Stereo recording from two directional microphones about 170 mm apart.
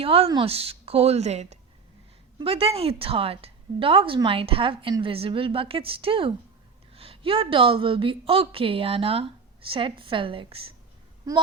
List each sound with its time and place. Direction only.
0.0 s a woman's voice: 35° right (ahead or behind)